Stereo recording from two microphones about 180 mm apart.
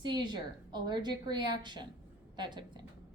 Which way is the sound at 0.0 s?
25° right (ahead or behind).